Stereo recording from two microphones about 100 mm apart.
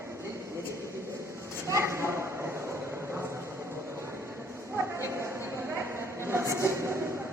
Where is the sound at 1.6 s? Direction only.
30° right (ahead or behind).